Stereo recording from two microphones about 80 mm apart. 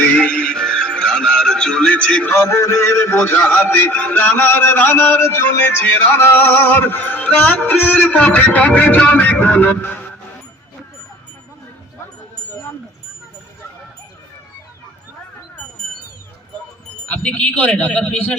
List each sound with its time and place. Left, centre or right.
0.0 s music: centre
2.3 s music: left
17.1 s speech: centre